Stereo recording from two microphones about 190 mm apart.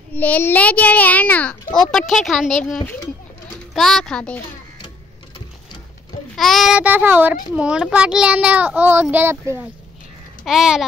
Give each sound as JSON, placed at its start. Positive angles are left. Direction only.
{"t": 0.1, "sound": "a child's voice", "side_deg": 10}
{"t": 6.3, "sound": "a child's voice", "side_deg": 0}
{"t": 10.4, "sound": "a child's voice", "side_deg": 0}